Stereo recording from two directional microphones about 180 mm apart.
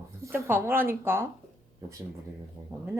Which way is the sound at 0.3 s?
10° right (ahead or behind).